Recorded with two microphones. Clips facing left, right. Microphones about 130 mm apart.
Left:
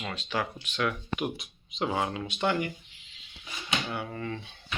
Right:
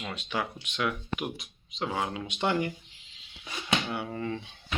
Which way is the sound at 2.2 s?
20° right (ahead or behind).